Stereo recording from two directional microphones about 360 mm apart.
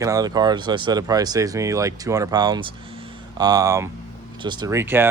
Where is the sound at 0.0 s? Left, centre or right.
Centre.